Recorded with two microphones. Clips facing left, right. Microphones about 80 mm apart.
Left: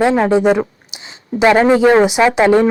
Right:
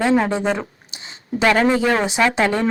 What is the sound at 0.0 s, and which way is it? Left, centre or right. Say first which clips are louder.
A woman's voice: left 6 dB; left.